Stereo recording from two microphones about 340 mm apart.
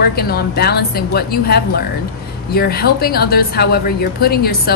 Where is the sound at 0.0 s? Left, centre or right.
Left.